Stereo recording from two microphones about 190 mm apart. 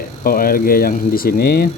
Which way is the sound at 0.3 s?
50° left (ahead or behind).